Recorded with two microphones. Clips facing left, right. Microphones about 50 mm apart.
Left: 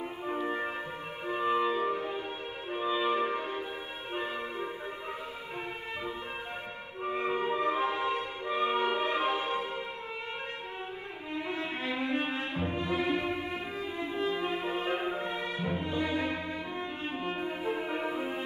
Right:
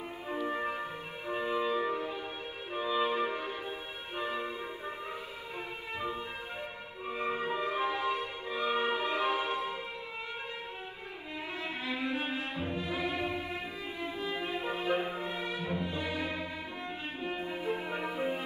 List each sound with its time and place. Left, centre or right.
0.4 s music: left
2.8 s music: left
7.1 s music: left
11.8 s music: left